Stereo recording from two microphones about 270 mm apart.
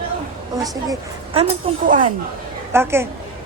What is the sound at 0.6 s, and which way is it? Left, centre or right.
Speech, centre.